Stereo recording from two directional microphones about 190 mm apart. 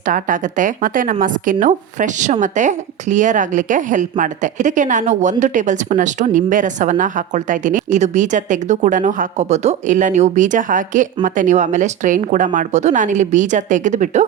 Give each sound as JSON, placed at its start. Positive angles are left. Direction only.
{"t": 0.1, "sound": "a woman's voice", "side_deg": -45}